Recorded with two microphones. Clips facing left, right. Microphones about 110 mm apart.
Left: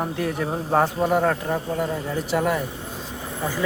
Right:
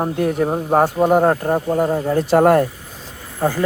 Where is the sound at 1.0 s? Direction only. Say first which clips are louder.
Right 6 dB; 45° right (ahead or behind).